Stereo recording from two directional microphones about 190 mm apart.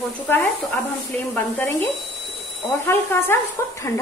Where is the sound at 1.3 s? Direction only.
10° left (ahead or behind).